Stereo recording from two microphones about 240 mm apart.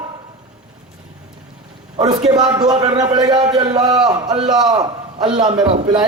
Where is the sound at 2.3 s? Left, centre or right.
Centre.